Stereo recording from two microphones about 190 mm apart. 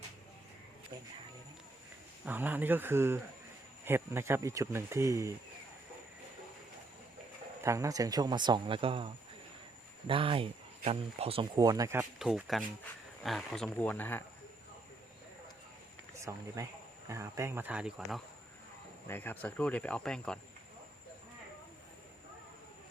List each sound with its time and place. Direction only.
2.2 s speech: 10° right (ahead or behind)
7.6 s speech: 15° right (ahead or behind); by 11.4 s 30° right (ahead or behind)
11.5 s speech: 20° right (ahead or behind)
12.2 s speech: centre (ahead or behind)
16.1 s speech: 15° right (ahead or behind)
19.0 s speech: 10° left (ahead or behind)